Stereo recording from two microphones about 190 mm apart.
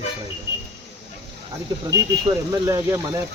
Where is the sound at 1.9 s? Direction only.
20° right (ahead or behind).